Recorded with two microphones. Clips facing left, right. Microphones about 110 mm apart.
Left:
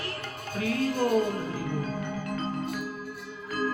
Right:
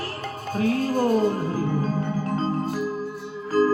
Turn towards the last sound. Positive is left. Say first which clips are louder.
# right 10 dB
turn(degrees=-35)  # may be behind; listen again after turning